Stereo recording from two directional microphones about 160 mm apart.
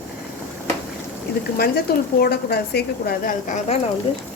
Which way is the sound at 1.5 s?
75° left (ahead or behind).